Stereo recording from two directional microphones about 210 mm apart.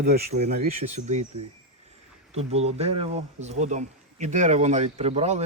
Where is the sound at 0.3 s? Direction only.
30° right (ahead or behind).